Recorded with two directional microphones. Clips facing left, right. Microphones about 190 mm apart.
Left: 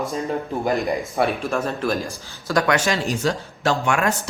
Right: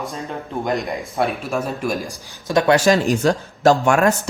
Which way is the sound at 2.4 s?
25° right (ahead or behind).